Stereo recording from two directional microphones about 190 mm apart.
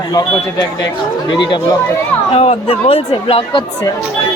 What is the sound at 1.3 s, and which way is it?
A woman's voice, 25° left (ahead or behind).